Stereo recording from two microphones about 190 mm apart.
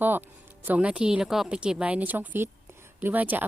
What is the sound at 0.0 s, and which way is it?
A woman's voice, 10° right (ahead or behind).